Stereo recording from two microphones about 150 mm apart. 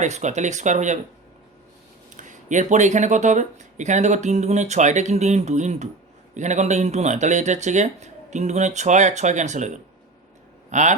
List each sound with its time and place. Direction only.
0.0 s speech: 50° right (ahead or behind)
2.2 s speech: 55° right (ahead or behind)